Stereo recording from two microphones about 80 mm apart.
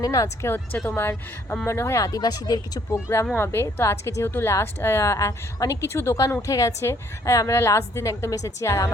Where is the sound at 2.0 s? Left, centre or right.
Left.